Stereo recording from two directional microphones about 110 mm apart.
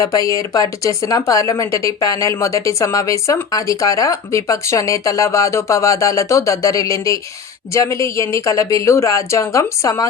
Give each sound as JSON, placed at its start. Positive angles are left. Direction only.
{"t": 0.0, "sound": "speech", "side_deg": 30}